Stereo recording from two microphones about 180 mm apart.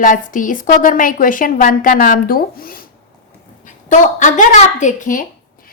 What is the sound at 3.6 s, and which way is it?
A woman's voice, 45° left (ahead or behind).